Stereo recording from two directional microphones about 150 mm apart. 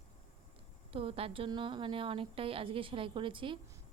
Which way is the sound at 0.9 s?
40° right (ahead or behind).